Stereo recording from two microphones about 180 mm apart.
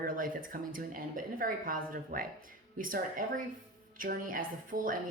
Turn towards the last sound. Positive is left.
turn(degrees=-50)  # may be behind; listen again after turning